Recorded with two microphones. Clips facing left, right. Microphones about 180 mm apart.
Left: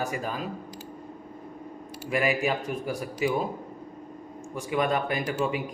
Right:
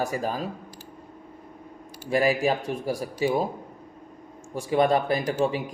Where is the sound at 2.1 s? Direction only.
35° right (ahead or behind).